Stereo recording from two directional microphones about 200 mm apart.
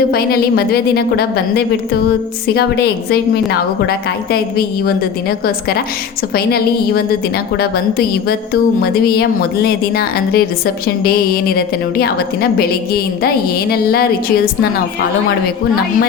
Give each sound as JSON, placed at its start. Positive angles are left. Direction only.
{"t": 0.1, "sound": "a woman's voice", "side_deg": 50}
{"t": 6.3, "sound": "a woman's voice", "side_deg": 50}